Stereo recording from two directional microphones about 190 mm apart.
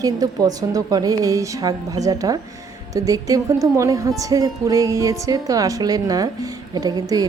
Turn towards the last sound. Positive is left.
turn(degrees=-20)  # may be behind; listen again after turning